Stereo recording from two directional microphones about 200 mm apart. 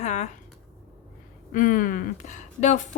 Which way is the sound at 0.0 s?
35° left (ahead or behind).